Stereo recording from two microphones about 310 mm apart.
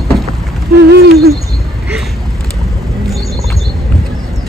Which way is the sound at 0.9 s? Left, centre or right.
Right.